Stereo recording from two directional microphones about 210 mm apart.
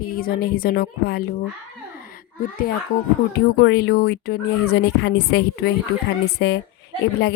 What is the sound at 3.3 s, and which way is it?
Speech, 50° left (ahead or behind).